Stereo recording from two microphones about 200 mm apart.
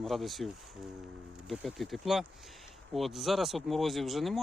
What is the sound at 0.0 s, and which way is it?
Speech, centre (ahead or behind).